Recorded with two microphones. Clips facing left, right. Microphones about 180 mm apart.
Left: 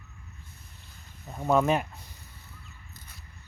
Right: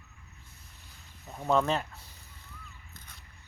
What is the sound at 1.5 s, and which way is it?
Speech, 10° left (ahead or behind).